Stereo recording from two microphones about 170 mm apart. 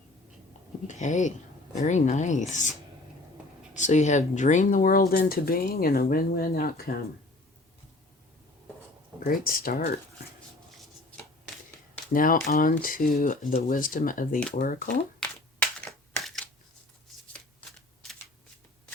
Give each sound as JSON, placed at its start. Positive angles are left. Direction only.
{"t": 0.9, "sound": "speech", "side_deg": 45}
{"t": 3.8, "sound": "speech", "side_deg": 45}
{"t": 9.2, "sound": "speech", "side_deg": 60}
{"t": 12.1, "sound": "speech", "side_deg": 55}
{"t": 15.2, "sound": "crushing", "side_deg": 5}
{"t": 17.7, "sound": "shuffling cards", "side_deg": 0}